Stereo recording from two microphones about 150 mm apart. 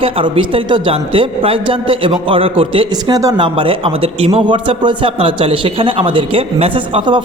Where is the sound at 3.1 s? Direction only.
25° right (ahead or behind).